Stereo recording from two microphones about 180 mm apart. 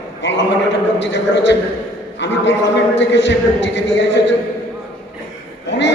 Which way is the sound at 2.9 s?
80° left.